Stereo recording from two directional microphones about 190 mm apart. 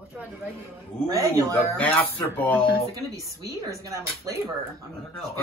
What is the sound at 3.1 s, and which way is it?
Speech, 15° right (ahead or behind).